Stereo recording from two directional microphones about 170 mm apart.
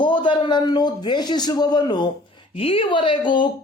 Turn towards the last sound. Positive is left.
turn(degrees=30)  # may be behind; listen again after turning